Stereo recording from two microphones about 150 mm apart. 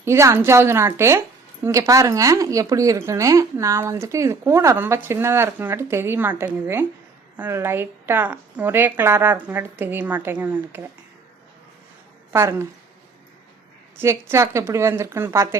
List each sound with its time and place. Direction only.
0.0 s a woman's voice: 20° right (ahead or behind)
12.3 s a woman's voice: 20° right (ahead or behind)
14.0 s a woman's voice: 15° right (ahead or behind)